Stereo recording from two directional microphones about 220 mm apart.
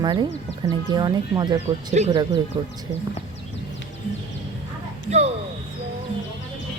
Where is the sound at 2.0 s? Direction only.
30° right (ahead or behind).